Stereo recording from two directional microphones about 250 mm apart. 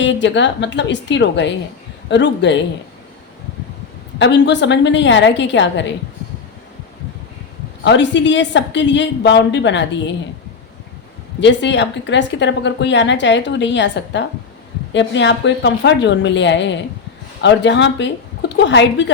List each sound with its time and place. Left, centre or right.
0.0 s a woman's voice: left
4.2 s a woman's voice: left
7.9 s a woman's voice: left
11.3 s a woman's voice: left